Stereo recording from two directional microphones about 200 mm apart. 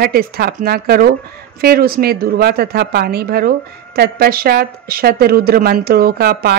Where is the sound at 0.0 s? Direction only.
50° right (ahead or behind).